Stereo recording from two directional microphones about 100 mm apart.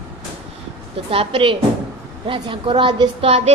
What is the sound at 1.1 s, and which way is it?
A man's voice, 65° right (ahead or behind).